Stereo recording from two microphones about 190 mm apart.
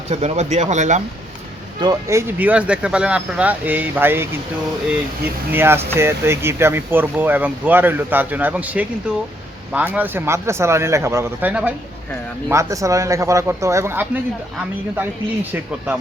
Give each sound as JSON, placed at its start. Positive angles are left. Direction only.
{"t": 0.1, "sound": "speech", "side_deg": -35}
{"t": 1.8, "sound": "speech", "side_deg": -15}
{"t": 5.5, "sound": "speech", "side_deg": -10}